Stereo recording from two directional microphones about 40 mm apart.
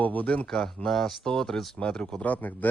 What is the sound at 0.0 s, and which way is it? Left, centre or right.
Speech, left.